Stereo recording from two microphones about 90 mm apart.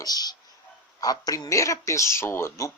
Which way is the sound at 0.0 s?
45° left (ahead or behind).